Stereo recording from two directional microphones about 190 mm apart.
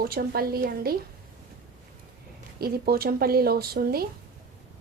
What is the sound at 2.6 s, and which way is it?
A woman's voice, 55° right (ahead or behind).